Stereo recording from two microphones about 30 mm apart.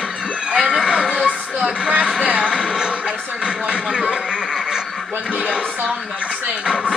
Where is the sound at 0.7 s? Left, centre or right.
Right.